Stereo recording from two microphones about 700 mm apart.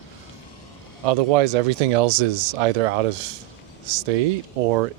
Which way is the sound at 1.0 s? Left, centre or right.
Right.